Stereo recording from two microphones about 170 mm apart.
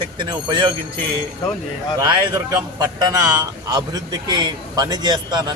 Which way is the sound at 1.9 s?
20° right (ahead or behind).